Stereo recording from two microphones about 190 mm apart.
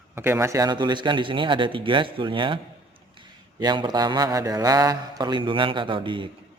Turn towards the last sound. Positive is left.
turn(degrees=-25)  # may be behind; listen again after turning